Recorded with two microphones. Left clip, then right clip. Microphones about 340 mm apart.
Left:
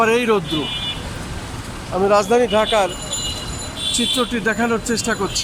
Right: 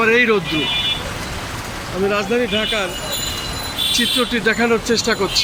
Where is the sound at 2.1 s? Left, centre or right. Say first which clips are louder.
Left 6 dB; centre.